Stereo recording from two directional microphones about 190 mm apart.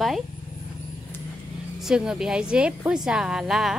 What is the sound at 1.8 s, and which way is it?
A woman's voice, 5° right (ahead or behind).